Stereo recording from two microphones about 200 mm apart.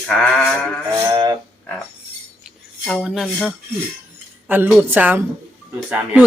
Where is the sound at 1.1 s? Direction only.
20° right (ahead or behind).